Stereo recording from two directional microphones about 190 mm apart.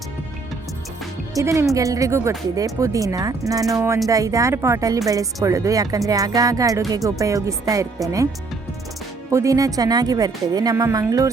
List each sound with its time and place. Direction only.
1.4 s speech: 15° right (ahead or behind)
9.3 s a woman's voice: 15° right (ahead or behind)